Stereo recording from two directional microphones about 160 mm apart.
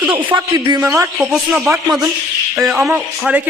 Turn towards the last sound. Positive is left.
turn(degrees=-10)  # may be behind; listen again after turning